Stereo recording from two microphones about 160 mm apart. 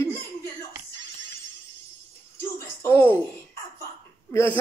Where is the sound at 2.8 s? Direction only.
15° left (ahead or behind).